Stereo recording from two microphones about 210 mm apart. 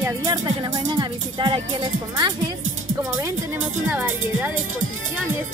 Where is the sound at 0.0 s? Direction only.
15° right (ahead or behind).